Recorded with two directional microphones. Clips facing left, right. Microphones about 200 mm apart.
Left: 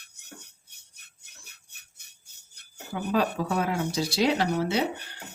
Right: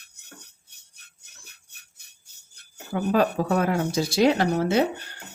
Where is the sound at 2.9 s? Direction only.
50° right (ahead or behind).